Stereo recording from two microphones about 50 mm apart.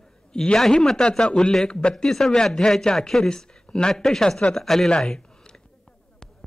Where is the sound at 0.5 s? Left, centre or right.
Centre.